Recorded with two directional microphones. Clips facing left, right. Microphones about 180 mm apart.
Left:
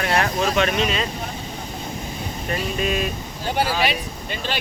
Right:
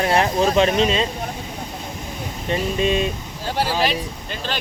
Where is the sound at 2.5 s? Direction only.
25° right (ahead or behind).